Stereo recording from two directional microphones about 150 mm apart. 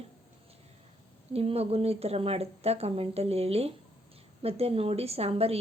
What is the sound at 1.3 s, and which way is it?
A woman's voice, 40° right (ahead or behind).